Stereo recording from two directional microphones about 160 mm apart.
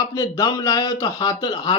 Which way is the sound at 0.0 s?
25° left (ahead or behind).